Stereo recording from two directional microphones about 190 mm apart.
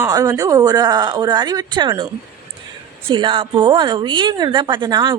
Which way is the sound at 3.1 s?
25° right (ahead or behind).